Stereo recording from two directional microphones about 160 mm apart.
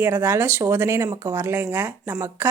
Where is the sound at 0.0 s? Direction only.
10° right (ahead or behind).